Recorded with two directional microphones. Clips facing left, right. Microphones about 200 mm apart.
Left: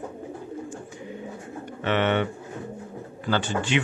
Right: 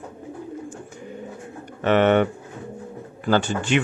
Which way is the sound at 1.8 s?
45° right (ahead or behind).